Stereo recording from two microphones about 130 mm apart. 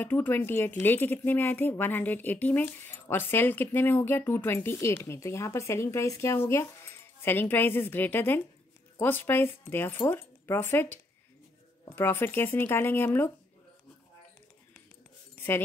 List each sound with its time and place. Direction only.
0.0 s a woman's voice: 15° left (ahead or behind)